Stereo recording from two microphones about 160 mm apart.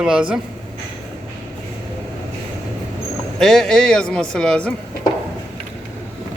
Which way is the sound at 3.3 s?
Centre (ahead or behind).